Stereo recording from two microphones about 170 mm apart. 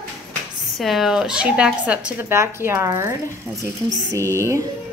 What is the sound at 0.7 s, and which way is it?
A woman's voice, centre (ahead or behind).